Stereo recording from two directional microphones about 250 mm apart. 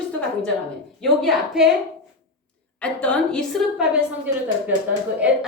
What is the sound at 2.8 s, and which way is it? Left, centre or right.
A woman's voice, centre.